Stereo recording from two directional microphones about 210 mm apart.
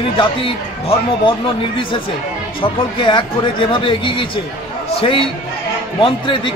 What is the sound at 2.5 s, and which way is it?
Speech, 25° left (ahead or behind).